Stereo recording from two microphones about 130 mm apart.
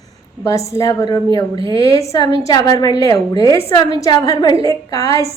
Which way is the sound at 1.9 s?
25° left (ahead or behind).